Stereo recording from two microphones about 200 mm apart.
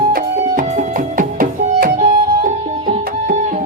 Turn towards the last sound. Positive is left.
turn(degrees=-40)  # may be behind; listen again after turning